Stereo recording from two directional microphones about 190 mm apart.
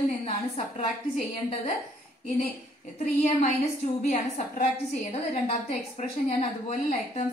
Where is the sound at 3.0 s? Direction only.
40° left (ahead or behind).